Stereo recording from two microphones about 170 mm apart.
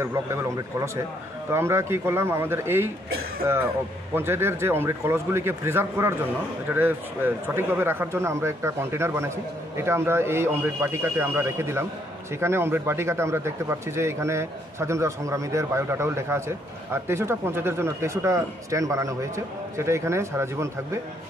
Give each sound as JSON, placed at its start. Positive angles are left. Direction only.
{"t": 0.0, "sound": "speech", "side_deg": -15}
{"t": 4.1, "sound": "speech", "side_deg": -15}